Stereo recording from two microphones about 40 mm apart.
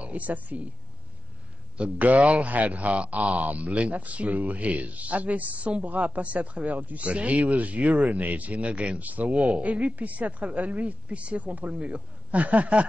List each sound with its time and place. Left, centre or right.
0.0 s a man's voice: right
1.8 s a man's voice: right